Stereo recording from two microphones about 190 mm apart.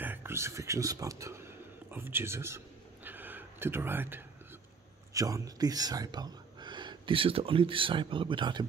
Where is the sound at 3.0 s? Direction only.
10° right (ahead or behind).